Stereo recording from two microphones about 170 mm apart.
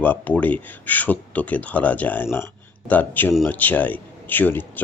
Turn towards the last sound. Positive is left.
turn(degrees=10)  # may be behind; listen again after turning